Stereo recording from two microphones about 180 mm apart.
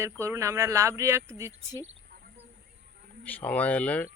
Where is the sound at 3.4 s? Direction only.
10° left (ahead or behind).